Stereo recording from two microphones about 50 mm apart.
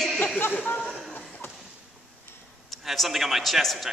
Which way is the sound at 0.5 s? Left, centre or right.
Left.